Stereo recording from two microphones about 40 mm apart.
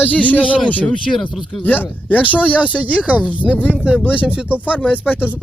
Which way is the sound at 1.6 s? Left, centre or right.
Left.